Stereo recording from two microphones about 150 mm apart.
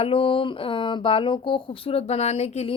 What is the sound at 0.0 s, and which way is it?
Speech, 35° left (ahead or behind).